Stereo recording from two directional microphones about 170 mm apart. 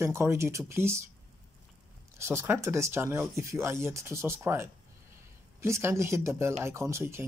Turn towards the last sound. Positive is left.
turn(degrees=-15)  # may be behind; listen again after turning